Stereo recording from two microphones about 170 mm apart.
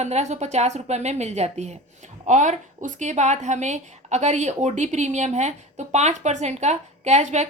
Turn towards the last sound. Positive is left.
turn(degrees=-40)  # may be behind; listen again after turning